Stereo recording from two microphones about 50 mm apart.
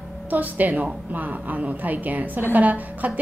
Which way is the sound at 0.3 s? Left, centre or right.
Right.